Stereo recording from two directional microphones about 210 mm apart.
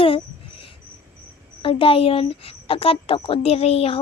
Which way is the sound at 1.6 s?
25° left (ahead or behind).